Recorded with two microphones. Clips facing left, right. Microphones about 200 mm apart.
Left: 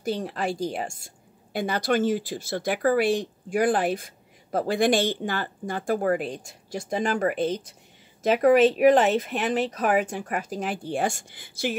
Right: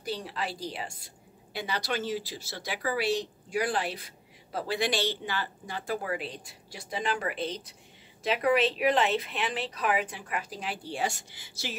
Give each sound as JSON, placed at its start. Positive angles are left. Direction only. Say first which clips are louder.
{"t": 0.0, "sound": "a woman's voice", "louder": "left 7 dB", "side_deg": 45}